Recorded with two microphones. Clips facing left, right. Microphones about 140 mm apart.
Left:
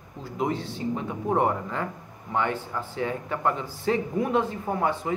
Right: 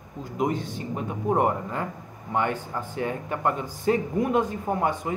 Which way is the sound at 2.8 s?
50° right (ahead or behind).